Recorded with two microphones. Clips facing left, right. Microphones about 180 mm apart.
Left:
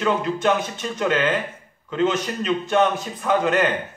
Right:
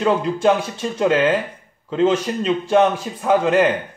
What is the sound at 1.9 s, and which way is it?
Speech, 30° right (ahead or behind).